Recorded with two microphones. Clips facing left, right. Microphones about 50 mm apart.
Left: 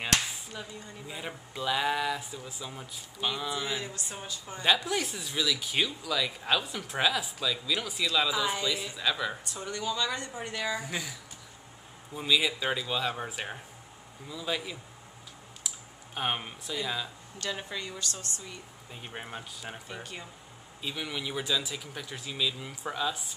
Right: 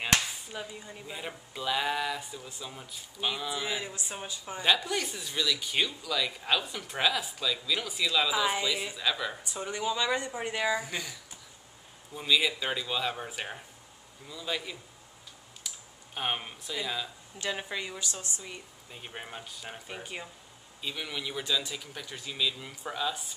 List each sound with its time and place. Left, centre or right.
0.5 s speech: centre
1.0 s speech: centre
4.6 s speech: centre
8.3 s speech: centre
9.4 s speech: centre
10.7 s speech: centre
16.2 s speech: centre
17.4 s speech: centre
18.9 s speech: centre
19.9 s speech: centre
20.8 s speech: centre